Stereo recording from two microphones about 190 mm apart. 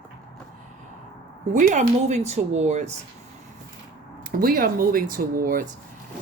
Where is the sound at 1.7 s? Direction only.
35° right (ahead or behind).